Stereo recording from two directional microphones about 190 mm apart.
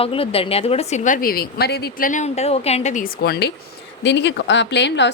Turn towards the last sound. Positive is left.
turn(degrees=65)  # may be behind; listen again after turning